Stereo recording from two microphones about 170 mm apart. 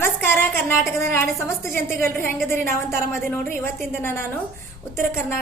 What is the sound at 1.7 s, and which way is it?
A woman's voice, 15° left (ahead or behind).